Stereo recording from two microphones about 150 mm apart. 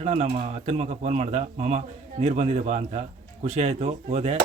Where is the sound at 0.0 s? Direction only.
45° right (ahead or behind).